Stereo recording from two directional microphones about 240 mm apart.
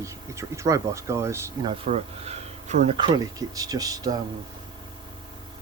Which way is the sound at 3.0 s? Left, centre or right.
Centre.